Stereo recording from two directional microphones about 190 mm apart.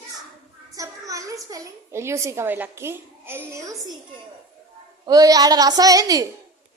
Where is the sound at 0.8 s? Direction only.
15° right (ahead or behind).